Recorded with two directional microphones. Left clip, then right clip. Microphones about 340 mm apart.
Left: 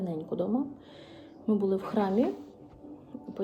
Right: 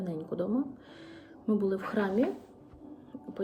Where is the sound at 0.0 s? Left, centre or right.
Centre.